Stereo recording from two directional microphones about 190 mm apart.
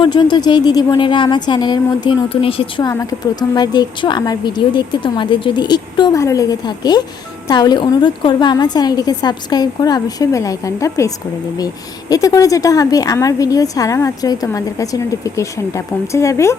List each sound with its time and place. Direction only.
0.0 s a woman's voice: 25° left (ahead or behind)
2.9 s a woman's voice: 15° left (ahead or behind)